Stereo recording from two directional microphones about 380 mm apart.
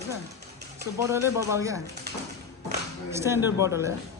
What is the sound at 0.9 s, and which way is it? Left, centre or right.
Speech, centre.